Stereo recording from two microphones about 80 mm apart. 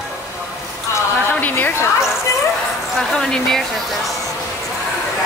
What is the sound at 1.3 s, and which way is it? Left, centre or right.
Speech, left.